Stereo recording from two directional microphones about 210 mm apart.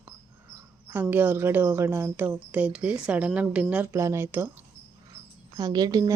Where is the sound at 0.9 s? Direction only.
10° right (ahead or behind).